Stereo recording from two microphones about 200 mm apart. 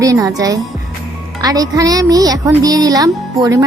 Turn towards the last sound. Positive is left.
turn(degrees=-15)  # may be behind; listen again after turning